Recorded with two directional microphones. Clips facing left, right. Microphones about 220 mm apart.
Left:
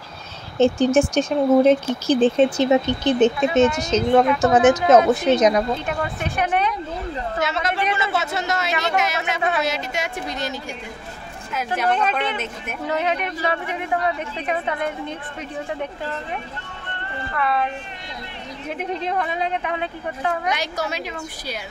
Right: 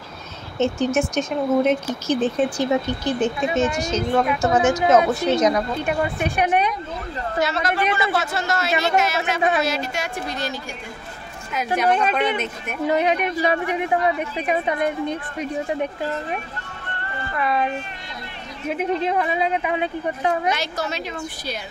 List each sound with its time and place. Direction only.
0.6 s speech: 30° left (ahead or behind)
5.9 s speech: 15° right (ahead or behind)
7.3 s speech: 20° left (ahead or behind)
11.5 s speech: centre (ahead or behind)
11.9 s speech: 10° right (ahead or behind)
17.4 s speech: 15° right (ahead or behind)
18.8 s speech: 5° right (ahead or behind)
20.4 s a woman's voice: 15° left (ahead or behind)